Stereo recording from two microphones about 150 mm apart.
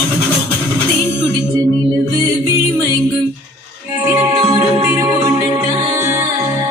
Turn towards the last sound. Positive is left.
turn(degrees=-20)  # may be behind; listen again after turning